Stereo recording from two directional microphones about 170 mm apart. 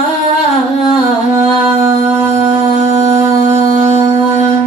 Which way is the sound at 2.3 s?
40° right (ahead or behind).